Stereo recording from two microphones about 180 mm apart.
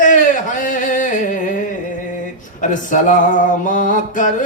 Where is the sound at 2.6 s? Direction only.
45° left (ahead or behind).